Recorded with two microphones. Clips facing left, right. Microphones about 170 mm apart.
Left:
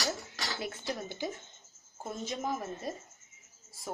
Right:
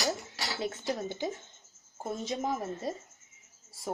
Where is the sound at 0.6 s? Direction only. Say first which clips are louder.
Right 5 dB; 20° right (ahead or behind).